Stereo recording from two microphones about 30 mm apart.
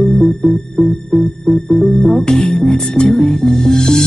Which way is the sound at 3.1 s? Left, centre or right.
Left.